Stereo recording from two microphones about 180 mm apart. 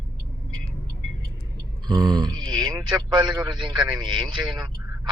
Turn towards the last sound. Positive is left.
turn(degrees=-25)  # may be behind; listen again after turning